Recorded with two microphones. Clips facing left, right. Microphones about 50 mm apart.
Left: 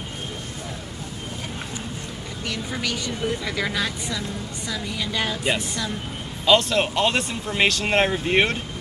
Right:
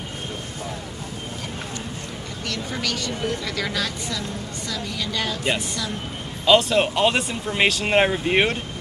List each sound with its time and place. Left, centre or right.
2.7 s a woman's voice: centre
6.4 s speech: centre